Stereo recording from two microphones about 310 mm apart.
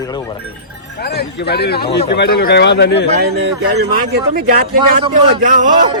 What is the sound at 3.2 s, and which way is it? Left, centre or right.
Speech, right.